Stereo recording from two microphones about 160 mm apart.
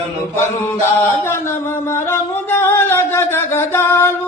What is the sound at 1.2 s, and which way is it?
Singing, 15° left (ahead or behind).